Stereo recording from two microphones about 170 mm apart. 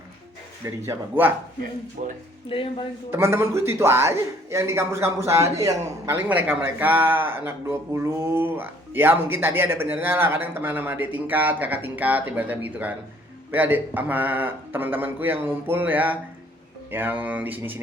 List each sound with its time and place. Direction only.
0.9 s a man's voice: 10° right (ahead or behind)
2.0 s speech: 45° right (ahead or behind)
2.5 s speech: 30° left (ahead or behind)
3.1 s a man's voice: 15° right (ahead or behind)